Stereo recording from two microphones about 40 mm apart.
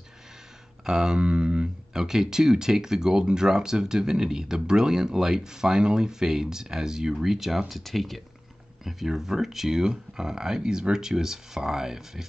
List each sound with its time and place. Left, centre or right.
0.8 s speech: centre
8.8 s speech: centre